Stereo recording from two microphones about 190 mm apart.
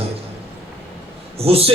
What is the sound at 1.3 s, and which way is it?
Speech, 30° right (ahead or behind).